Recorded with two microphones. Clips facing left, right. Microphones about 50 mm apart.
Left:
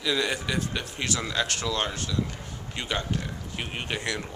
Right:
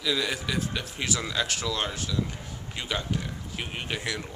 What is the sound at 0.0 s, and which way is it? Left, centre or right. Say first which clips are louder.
A man's voice: left 1 dB; centre.